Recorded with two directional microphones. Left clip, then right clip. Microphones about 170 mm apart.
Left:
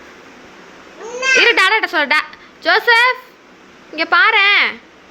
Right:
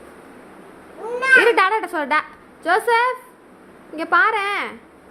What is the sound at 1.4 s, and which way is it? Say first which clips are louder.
A woman's voice: left 4 dB; 5° right (ahead or behind).